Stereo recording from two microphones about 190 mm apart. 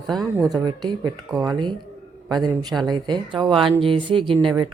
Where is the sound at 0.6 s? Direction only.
20° right (ahead or behind).